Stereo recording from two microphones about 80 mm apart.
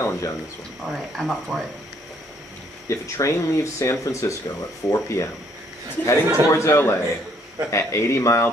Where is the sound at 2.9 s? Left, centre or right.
Left.